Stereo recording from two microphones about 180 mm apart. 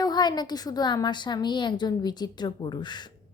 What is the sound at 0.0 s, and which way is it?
A woman's voice, 25° left (ahead or behind).